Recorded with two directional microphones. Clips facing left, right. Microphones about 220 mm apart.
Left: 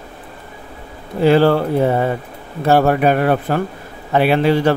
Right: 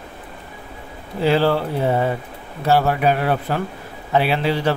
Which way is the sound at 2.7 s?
50° left (ahead or behind).